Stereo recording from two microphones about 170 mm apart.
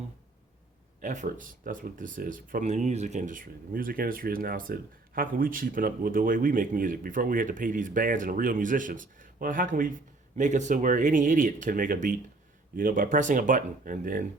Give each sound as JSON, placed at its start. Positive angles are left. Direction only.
{"t": 1.0, "sound": "speech", "side_deg": -45}